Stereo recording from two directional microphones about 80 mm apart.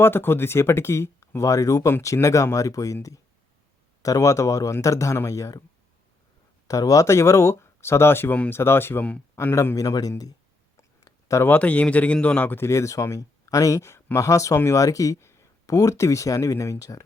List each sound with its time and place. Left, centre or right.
0.0 s speech: left
6.7 s a man's voice: left
9.7 s speech: left
10.8 s a sound: left
11.4 s speech: left